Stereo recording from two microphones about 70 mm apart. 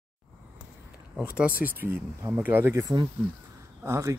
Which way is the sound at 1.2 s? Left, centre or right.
Centre.